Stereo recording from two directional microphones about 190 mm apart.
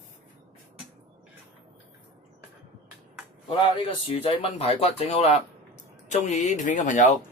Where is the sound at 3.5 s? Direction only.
30° left (ahead or behind).